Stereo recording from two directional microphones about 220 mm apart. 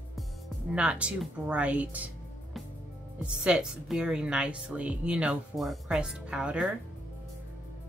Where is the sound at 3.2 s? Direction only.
5° right (ahead or behind).